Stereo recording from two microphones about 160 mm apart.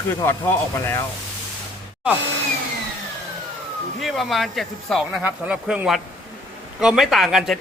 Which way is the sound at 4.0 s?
Centre (ahead or behind).